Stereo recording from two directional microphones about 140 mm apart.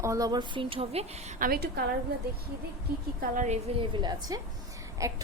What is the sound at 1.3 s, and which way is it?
Speech, 85° right.